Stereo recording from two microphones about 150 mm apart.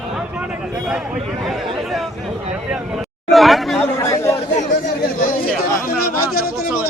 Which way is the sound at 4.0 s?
20° left (ahead or behind).